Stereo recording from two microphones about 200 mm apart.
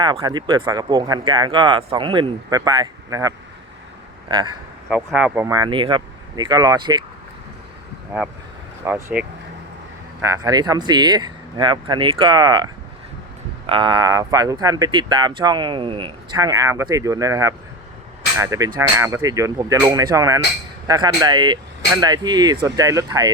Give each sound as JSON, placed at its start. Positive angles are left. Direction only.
{"t": 0.0, "sound": "speech", "side_deg": -20}
{"t": 4.9, "sound": "speech", "side_deg": -5}
{"t": 5.5, "sound": "speech", "side_deg": -25}
{"t": 8.1, "sound": "speech", "side_deg": -10}
{"t": 13.7, "sound": "speech", "side_deg": -25}